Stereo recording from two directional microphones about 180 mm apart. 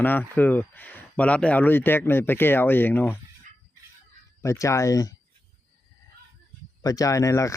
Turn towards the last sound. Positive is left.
turn(degrees=15)  # may be behind; listen again after turning